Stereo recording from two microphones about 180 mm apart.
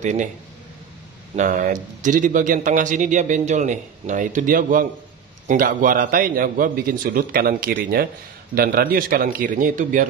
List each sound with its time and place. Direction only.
0.0 s speech: 40° right (ahead or behind)
1.3 s speech: 45° right (ahead or behind)